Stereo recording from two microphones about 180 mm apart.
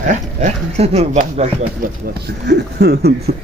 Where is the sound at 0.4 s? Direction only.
40° right (ahead or behind).